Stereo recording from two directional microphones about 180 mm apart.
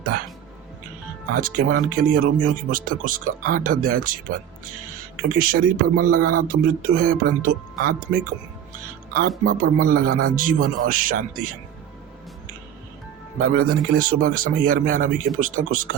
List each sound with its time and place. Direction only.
0.1 s speech: 55° right (ahead or behind)
1.3 s speech: 50° right (ahead or behind)
5.4 s speech: 50° right (ahead or behind)
9.4 s speech: 50° right (ahead or behind)
13.5 s speech: 55° right (ahead or behind)